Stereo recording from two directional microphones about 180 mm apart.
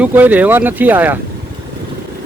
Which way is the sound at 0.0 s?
10° right (ahead or behind).